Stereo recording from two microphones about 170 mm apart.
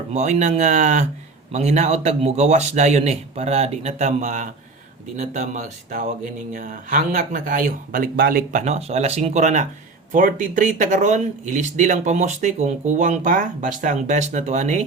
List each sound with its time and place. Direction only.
0.1 s speech: 45° right (ahead or behind)